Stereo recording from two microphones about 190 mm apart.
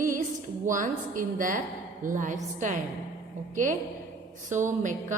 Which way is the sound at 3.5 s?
40° right (ahead or behind).